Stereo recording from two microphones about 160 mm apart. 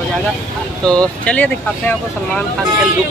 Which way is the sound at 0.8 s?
5° left (ahead or behind).